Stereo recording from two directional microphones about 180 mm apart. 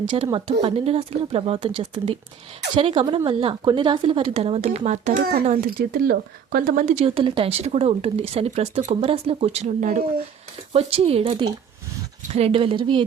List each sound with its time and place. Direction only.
0.0 s speech: 25° right (ahead or behind); by 10.1 s 45° right (ahead or behind)
10.7 s speech: 35° right (ahead or behind)